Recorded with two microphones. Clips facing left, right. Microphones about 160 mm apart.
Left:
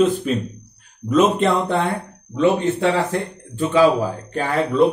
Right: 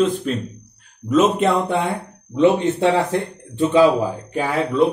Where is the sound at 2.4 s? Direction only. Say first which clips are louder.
Right 2 dB; 20° right (ahead or behind).